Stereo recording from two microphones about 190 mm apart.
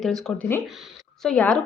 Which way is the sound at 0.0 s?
Centre (ahead or behind).